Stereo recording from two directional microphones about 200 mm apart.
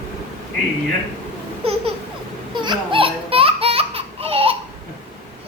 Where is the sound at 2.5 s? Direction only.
25° right (ahead or behind).